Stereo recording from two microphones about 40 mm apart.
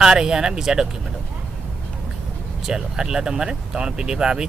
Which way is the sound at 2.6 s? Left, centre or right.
Centre.